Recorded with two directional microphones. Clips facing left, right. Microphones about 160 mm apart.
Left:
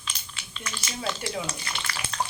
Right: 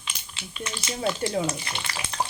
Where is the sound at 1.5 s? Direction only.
20° right (ahead or behind).